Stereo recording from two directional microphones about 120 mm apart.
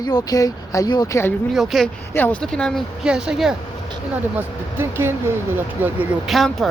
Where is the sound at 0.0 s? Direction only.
35° left (ahead or behind).